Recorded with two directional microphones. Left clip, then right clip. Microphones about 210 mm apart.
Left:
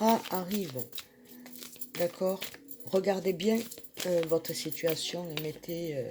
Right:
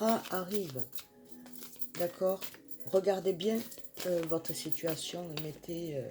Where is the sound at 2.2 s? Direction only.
35° left (ahead or behind).